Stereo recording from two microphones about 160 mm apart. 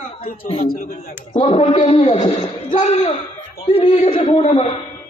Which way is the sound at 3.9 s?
30° left (ahead or behind).